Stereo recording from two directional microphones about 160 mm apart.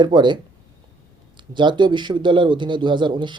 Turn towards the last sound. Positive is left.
turn(degrees=-30)  # may be behind; listen again after turning